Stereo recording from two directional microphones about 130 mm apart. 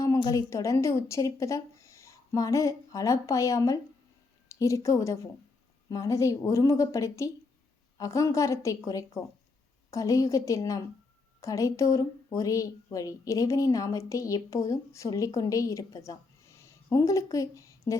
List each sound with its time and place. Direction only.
0.2 s a woman's voice: 30° left (ahead or behind)